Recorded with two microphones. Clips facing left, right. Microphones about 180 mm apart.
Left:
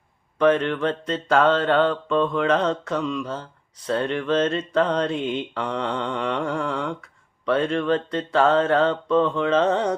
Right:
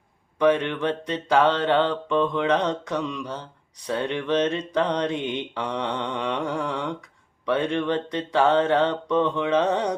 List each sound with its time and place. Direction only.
0.3 s mantra: 15° right (ahead or behind)